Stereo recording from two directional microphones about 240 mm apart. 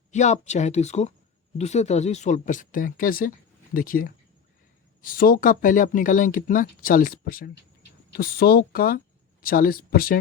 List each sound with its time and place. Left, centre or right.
0.1 s speech: left